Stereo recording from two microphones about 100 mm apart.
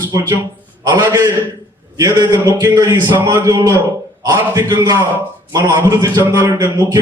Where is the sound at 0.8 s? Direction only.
45° right (ahead or behind).